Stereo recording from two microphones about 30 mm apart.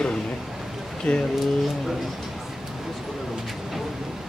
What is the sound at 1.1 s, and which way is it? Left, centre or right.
Speech, left.